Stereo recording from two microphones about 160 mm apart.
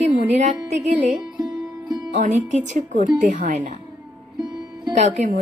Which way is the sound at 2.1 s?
45° right (ahead or behind).